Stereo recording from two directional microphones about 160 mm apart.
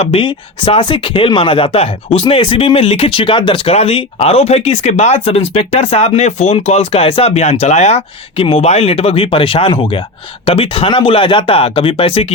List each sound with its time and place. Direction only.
0.0 s speech: 35° left (ahead or behind)